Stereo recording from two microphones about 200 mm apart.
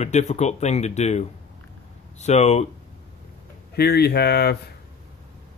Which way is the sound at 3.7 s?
55° left (ahead or behind).